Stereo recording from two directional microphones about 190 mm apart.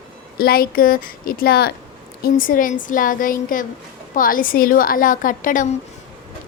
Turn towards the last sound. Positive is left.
turn(degrees=45)  # may be behind; listen again after turning